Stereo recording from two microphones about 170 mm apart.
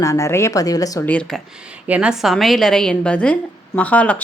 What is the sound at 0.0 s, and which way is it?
A woman's voice, 15° left (ahead or behind).